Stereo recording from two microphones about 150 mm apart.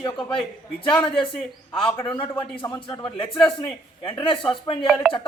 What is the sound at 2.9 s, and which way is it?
Speech, 35° left (ahead or behind).